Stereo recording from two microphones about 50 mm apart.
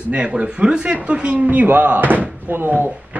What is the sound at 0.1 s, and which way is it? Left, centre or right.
A man's voice, right.